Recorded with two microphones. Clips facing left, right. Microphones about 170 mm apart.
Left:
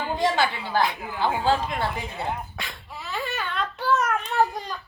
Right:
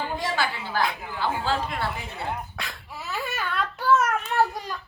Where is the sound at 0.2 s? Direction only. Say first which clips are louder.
Left 5 dB; 20° left (ahead or behind).